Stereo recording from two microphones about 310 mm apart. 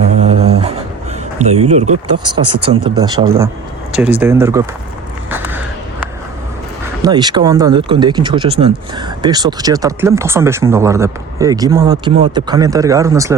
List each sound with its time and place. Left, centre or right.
0.2 s dog: centre
1.4 s speech: right
1.9 s speech: right
2.6 s speech: centre
5.3 s a sound: centre
7.0 s speech: centre